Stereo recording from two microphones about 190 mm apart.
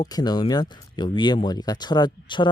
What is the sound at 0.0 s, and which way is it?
Speech, 20° left (ahead or behind).